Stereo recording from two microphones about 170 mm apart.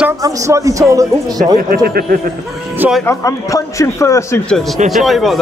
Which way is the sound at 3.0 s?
20° left (ahead or behind).